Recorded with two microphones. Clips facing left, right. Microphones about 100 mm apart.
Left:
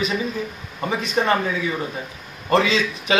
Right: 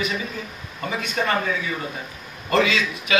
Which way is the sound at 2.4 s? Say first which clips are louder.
Left 2 dB; 30° left (ahead or behind).